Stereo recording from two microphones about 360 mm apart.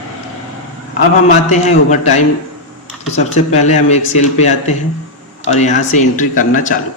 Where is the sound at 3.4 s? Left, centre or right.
Centre.